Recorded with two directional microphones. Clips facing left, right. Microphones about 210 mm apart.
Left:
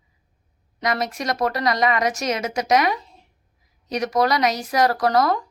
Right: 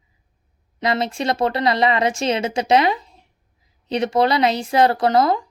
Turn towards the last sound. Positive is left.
turn(degrees=-25)  # may be behind; listen again after turning